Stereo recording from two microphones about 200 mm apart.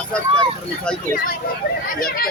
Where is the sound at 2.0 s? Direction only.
45° left (ahead or behind).